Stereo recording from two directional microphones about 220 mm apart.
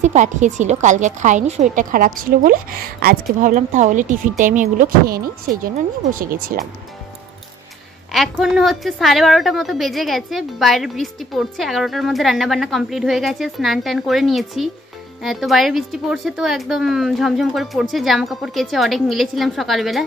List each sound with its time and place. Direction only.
0.0 s a woman's voice: 35° right (ahead or behind)
8.1 s a woman's voice: centre (ahead or behind)